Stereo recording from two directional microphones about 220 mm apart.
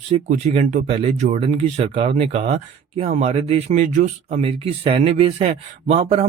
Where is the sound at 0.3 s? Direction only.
30° right (ahead or behind).